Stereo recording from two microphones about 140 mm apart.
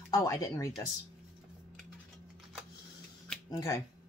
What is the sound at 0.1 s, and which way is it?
Speech, 25° left (ahead or behind).